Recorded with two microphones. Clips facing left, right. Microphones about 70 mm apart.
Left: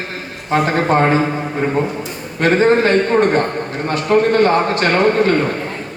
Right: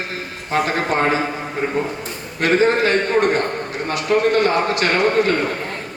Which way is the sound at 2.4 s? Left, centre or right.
Left.